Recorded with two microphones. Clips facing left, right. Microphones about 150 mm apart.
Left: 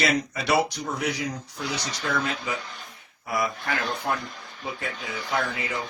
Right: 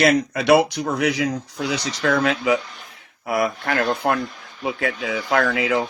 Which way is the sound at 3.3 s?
60° right (ahead or behind).